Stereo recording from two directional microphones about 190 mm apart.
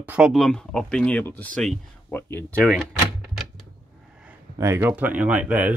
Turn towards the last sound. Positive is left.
turn(degrees=-10)  # may be behind; listen again after turning